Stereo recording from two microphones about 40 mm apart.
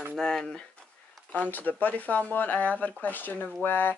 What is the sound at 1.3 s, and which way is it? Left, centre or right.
Speech, left.